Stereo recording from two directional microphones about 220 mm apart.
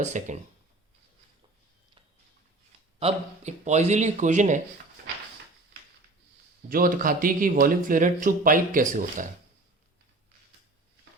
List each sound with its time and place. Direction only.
0.0 s speech: 35° right (ahead or behind)
3.0 s speech: 30° right (ahead or behind)
6.7 s speech: 40° right (ahead or behind)